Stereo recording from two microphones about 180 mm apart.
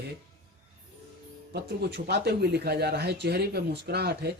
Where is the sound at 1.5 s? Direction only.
65° right (ahead or behind).